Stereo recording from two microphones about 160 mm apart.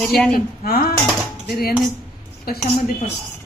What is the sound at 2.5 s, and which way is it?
Speech, 70° left (ahead or behind).